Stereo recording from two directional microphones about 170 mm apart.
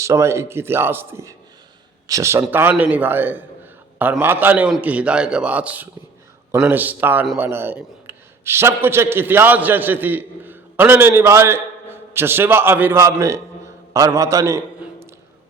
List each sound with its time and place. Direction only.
0.0 s a man's voice: 15° right (ahead or behind)